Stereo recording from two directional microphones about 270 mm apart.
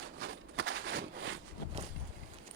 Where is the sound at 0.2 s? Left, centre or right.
Right.